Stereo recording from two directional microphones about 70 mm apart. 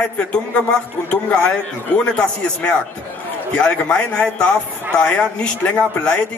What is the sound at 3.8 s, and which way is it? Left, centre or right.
A man's voice, centre.